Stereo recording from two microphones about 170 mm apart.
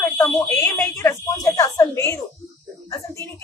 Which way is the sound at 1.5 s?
20° left (ahead or behind).